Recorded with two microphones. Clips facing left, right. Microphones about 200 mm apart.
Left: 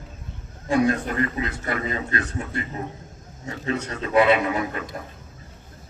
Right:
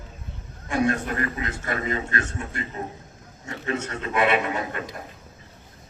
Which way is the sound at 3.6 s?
35° left (ahead or behind).